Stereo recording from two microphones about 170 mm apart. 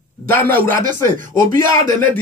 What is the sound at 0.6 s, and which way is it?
Music, 55° right (ahead or behind).